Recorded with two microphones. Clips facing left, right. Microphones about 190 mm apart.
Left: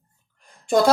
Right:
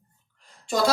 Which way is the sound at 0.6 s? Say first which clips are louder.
Left 6 dB; 50° left (ahead or behind).